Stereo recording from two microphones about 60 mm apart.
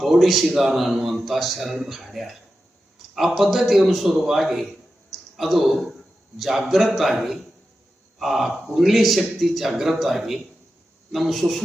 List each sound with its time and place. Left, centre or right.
0.0 s a man's voice: centre